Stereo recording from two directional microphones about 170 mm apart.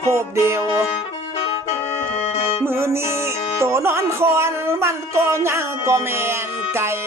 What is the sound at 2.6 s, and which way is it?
Music, 15° right (ahead or behind).